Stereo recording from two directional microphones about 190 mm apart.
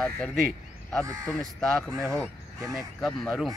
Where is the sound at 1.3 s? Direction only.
Centre (ahead or behind).